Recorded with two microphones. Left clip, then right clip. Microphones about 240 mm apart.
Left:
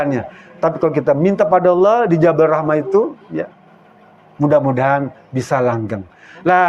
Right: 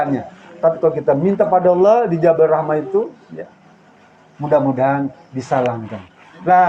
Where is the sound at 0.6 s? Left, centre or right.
Left.